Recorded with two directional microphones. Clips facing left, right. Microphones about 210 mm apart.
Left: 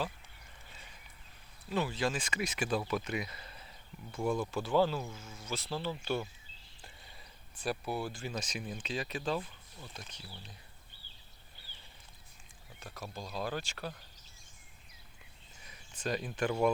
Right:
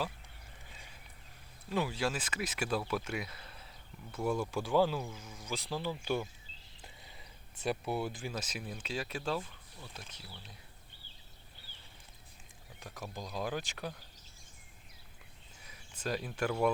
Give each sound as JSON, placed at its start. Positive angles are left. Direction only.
{"t": 1.7, "sound": "speech", "side_deg": -10}
{"t": 7.6, "sound": "speech", "side_deg": -20}
{"t": 8.2, "sound": "speech", "side_deg": -5}
{"t": 12.8, "sound": "speech", "side_deg": -15}
{"t": 15.6, "sound": "speech", "side_deg": -5}